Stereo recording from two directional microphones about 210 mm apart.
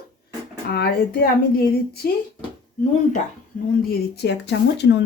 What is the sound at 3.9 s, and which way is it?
A woman's voice, 55° left (ahead or behind).